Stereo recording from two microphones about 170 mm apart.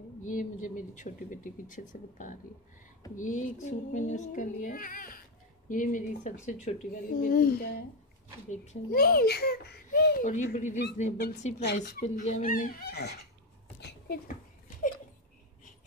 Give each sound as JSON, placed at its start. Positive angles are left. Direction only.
{"t": 0.2, "sound": "speech", "side_deg": 50}
{"t": 8.9, "sound": "a child's voice", "side_deg": 65}
{"t": 10.2, "sound": "speech", "side_deg": 45}
{"t": 11.6, "sound": "speech", "side_deg": 75}
{"t": 12.0, "sound": "speech", "side_deg": 50}
{"t": 13.7, "sound": "a sound", "side_deg": 75}